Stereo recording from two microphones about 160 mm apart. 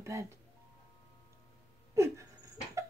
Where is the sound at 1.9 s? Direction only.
20° right (ahead or behind).